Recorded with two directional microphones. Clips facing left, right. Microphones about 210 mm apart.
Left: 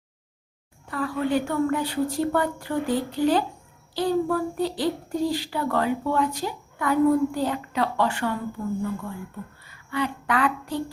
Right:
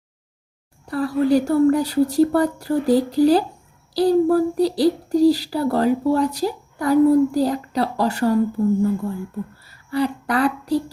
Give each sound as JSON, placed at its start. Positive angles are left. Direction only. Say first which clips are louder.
{"t": 0.9, "sound": "speech", "louder": "right 7 dB", "side_deg": -35}